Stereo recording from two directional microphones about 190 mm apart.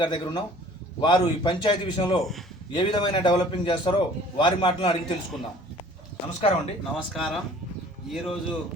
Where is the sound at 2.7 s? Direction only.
25° left (ahead or behind).